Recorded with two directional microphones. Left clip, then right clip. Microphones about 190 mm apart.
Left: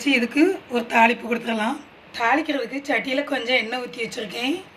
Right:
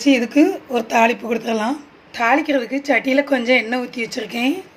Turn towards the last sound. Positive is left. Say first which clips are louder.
# right 4 dB
turn(degrees=-45)  # may be behind; listen again after turning